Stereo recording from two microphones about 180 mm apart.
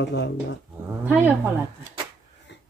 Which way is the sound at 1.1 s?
10° right (ahead or behind).